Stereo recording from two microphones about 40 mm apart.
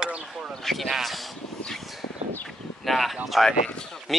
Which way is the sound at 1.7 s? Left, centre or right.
Centre.